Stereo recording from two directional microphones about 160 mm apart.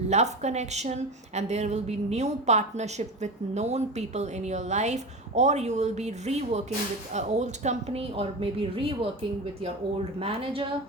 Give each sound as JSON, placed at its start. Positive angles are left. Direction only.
{"t": 0.1, "sound": "a woman's voice", "side_deg": -45}